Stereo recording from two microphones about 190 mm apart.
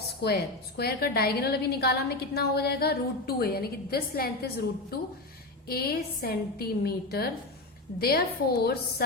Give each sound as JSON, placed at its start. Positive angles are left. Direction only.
{"t": 0.2, "sound": "a woman's voice", "side_deg": 55}